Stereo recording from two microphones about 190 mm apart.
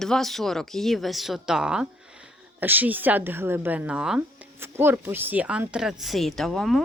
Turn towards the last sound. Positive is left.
turn(degrees=0)  # may be behind; listen again after turning